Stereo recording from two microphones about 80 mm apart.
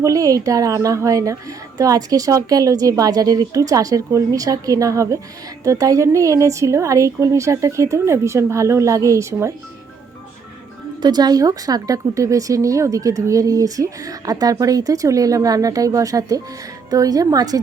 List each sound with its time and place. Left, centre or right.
0.0 s a woman's voice: right
11.0 s speech: right